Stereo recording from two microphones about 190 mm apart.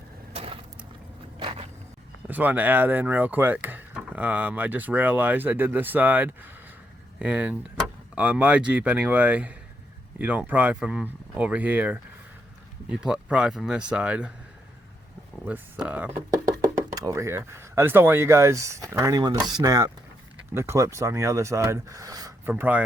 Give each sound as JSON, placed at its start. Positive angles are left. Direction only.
{"t": 0.3, "sound": "a sound", "side_deg": -30}
{"t": 2.2, "sound": "speech", "side_deg": -10}
{"t": 15.4, "sound": "speech", "side_deg": -10}
{"t": 16.9, "sound": "speech", "side_deg": -20}